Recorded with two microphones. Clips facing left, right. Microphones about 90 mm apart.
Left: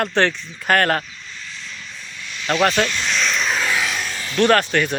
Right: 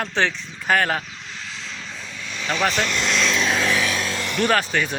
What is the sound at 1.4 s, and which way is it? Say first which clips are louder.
Vehicle: even; 90° right.